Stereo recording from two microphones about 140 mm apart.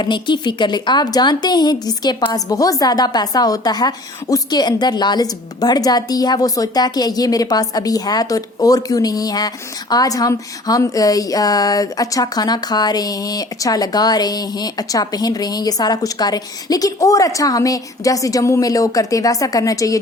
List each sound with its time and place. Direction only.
0.0 s speech: 35° left (ahead or behind)